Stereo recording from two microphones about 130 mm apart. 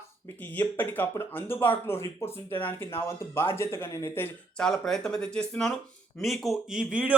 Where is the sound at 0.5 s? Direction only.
15° left (ahead or behind).